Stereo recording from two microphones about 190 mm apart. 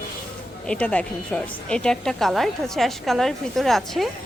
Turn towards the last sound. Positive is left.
turn(degrees=0)  # may be behind; listen again after turning